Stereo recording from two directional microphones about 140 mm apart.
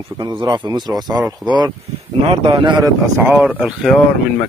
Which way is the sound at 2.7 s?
25° right (ahead or behind).